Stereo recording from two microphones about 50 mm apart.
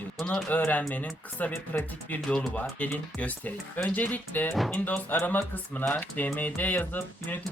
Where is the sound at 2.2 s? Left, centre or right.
Left.